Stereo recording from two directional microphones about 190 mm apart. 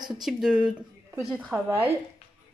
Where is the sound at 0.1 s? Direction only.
Centre (ahead or behind).